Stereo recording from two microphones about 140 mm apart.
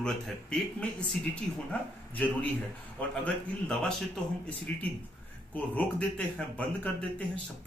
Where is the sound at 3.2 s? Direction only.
5° left (ahead or behind).